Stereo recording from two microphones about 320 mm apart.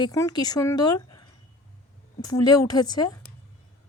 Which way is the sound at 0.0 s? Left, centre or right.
Centre.